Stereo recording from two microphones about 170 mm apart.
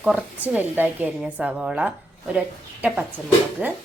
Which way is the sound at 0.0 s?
10° right (ahead or behind).